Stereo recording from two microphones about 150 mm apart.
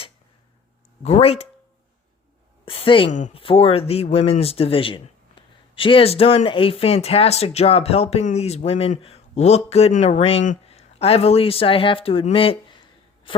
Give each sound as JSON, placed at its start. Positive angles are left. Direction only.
{"t": 1.0, "sound": "speech", "side_deg": 45}
{"t": 2.6, "sound": "a sound", "side_deg": 40}
{"t": 3.1, "sound": "speech", "side_deg": 55}
{"t": 3.3, "sound": "a man's voice", "side_deg": 40}